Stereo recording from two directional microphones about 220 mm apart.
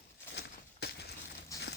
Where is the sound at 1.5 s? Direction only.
15° left (ahead or behind).